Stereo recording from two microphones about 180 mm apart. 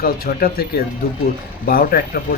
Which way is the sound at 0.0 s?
55° left (ahead or behind).